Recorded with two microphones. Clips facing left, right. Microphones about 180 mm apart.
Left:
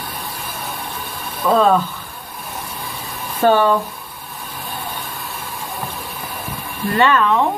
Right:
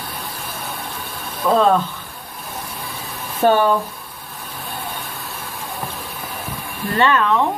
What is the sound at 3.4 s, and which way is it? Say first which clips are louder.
Speech: left 1 dB; 15° right (ahead or behind).